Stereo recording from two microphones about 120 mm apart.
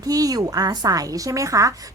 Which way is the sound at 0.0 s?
30° right (ahead or behind).